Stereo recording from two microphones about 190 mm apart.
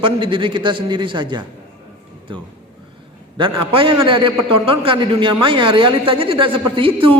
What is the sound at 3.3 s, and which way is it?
A man's voice, 25° right (ahead or behind).